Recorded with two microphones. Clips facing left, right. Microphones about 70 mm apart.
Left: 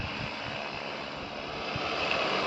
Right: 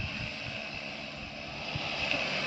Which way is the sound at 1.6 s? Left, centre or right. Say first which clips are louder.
Left 4 dB; left.